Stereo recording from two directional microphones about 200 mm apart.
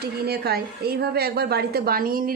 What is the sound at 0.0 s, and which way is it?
A woman's voice, 50° right (ahead or behind).